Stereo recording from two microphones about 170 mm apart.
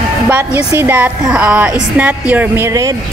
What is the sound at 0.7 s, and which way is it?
A woman's voice, 10° right (ahead or behind).